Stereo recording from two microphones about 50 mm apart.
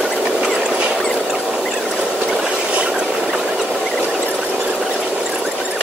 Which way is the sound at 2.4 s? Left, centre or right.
Right.